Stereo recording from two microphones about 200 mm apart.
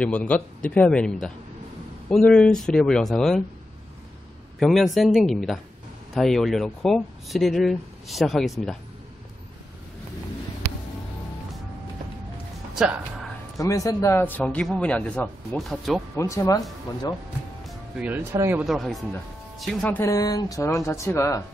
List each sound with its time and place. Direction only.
0.0 s speech: 5° left (ahead or behind)
4.6 s speech: centre (ahead or behind)
13.6 s a man's voice: 15° left (ahead or behind); by 16.0 s centre (ahead or behind)
16.2 s a man's voice: 15° left (ahead or behind)
17.6 s speech: 5° right (ahead or behind)
18.6 s a man's voice: centre (ahead or behind)